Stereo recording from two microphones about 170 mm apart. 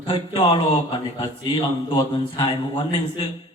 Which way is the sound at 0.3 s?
25° left (ahead or behind).